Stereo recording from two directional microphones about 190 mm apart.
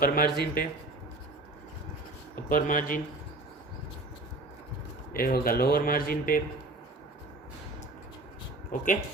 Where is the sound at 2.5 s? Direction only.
45° left (ahead or behind).